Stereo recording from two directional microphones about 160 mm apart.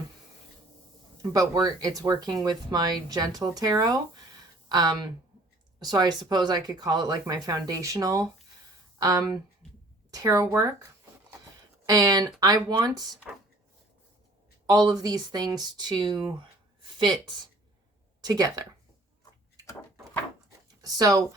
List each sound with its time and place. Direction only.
1.2 s speech: 20° right (ahead or behind)
11.9 s speech: 25° right (ahead or behind)
14.7 s speech: 25° right (ahead or behind)
20.8 s speech: 25° right (ahead or behind)